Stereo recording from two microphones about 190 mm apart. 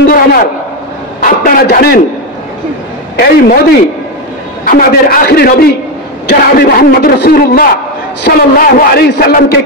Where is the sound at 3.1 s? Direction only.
55° left (ahead or behind).